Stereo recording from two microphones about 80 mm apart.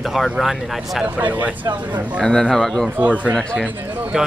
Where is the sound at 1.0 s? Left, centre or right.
Centre.